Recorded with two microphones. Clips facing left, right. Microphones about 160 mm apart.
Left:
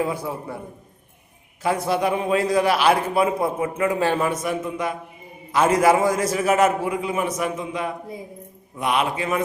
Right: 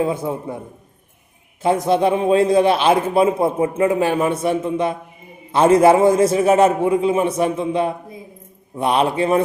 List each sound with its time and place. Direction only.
0.0 s a man's voice: 25° right (ahead or behind)
1.6 s a man's voice: 25° right (ahead or behind)
4.0 s a man's voice: 15° right (ahead or behind)
4.3 s a man's voice: 30° right (ahead or behind)